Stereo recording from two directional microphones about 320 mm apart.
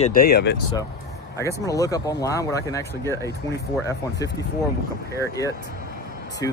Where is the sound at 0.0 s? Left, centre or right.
Left.